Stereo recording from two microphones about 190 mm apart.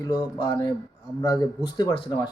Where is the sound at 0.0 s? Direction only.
20° left (ahead or behind).